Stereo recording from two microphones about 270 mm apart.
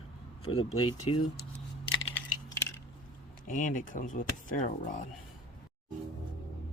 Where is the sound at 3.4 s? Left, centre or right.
Left.